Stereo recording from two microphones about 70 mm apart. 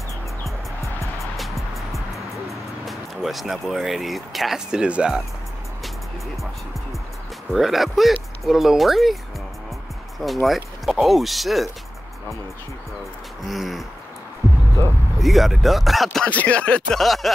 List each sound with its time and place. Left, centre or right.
1.3 s music: centre
2.8 s speech: centre
7.5 s speech: centre
13.5 s speech: centre
15.1 s speech: centre
16.3 s speech: centre
17.0 s speech: centre